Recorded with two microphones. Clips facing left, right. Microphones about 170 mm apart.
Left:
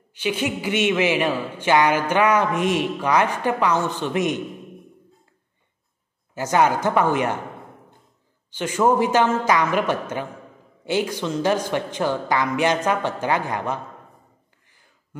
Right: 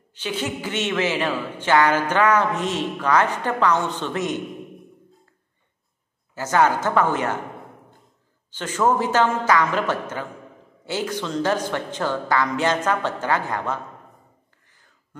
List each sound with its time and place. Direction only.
0.1 s speech: 10° left (ahead or behind)
6.3 s speech: 15° left (ahead or behind)
8.5 s speech: 15° left (ahead or behind)